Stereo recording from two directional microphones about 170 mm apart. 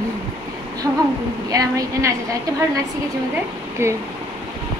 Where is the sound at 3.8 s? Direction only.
15° right (ahead or behind).